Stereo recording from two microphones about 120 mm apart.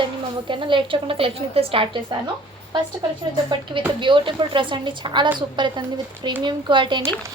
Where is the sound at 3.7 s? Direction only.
40° right (ahead or behind).